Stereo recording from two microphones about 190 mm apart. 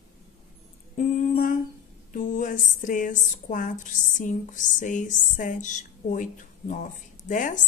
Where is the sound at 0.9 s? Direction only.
40° left (ahead or behind).